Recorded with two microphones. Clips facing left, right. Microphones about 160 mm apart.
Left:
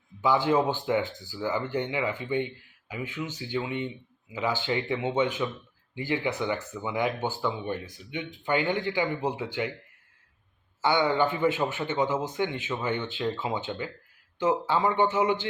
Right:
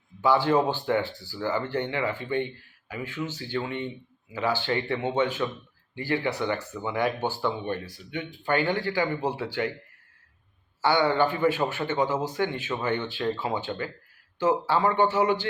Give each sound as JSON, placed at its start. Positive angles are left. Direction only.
{"t": 0.2, "sound": "speech", "side_deg": 15}
{"t": 10.8, "sound": "speech", "side_deg": 20}